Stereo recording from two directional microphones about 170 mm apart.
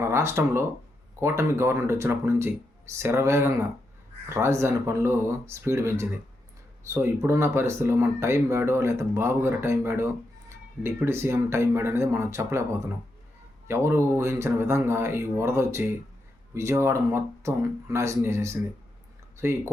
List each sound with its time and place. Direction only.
0.0 s speech: 15° right (ahead or behind)